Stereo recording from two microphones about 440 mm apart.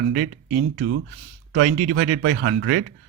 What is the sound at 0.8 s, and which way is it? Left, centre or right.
Speech, right.